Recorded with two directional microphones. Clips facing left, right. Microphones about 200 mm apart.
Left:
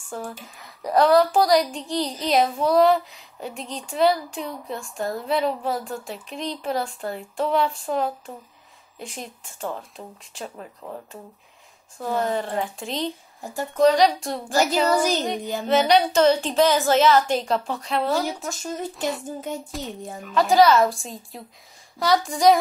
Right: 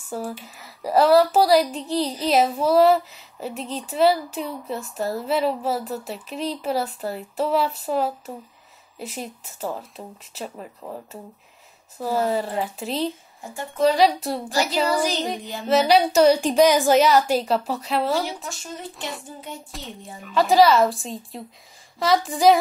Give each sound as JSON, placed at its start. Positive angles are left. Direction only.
{"t": 0.1, "sound": "speech", "side_deg": -5}
{"t": 14.5, "sound": "child singing", "side_deg": 45}
{"t": 15.6, "sound": "a woman's voice", "side_deg": -5}